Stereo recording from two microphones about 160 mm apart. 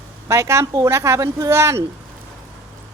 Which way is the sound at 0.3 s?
15° right (ahead or behind).